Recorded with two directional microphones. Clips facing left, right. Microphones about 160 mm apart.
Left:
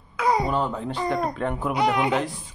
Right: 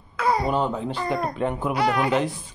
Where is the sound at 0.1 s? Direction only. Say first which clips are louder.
Even; 15° left (ahead or behind).